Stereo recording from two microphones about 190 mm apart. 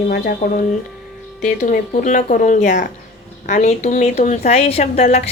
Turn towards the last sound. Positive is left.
turn(degrees=35)  # may be behind; listen again after turning